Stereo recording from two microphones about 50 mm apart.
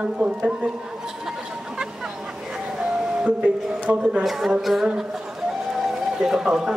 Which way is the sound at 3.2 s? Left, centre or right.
Right.